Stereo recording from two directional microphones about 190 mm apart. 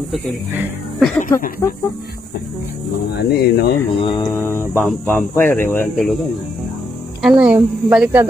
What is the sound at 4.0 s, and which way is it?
Mantra, 25° left (ahead or behind).